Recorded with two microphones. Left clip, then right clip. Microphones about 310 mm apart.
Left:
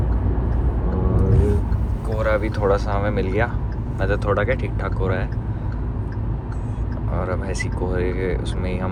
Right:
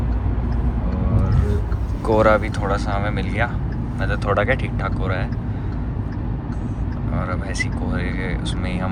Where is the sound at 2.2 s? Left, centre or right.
Centre.